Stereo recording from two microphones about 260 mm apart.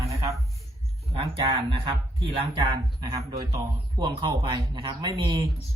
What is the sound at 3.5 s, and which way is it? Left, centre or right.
Speech, centre.